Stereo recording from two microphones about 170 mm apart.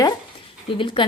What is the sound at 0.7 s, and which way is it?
Speech, 30° left (ahead or behind).